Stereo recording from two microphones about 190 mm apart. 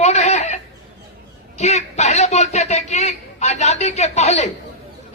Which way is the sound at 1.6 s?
35° left (ahead or behind).